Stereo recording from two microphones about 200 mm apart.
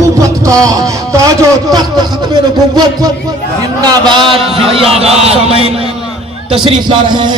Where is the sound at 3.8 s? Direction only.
25° right (ahead or behind).